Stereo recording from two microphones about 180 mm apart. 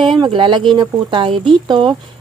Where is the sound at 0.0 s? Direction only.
25° right (ahead or behind).